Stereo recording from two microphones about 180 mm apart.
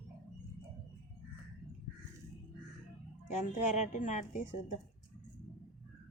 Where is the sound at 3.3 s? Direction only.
40° left (ahead or behind).